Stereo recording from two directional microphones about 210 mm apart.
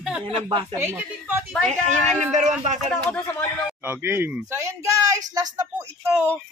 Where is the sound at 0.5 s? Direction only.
25° right (ahead or behind).